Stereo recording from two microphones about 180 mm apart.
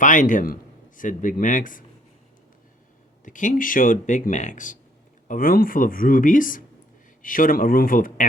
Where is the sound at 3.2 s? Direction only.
45° left (ahead or behind).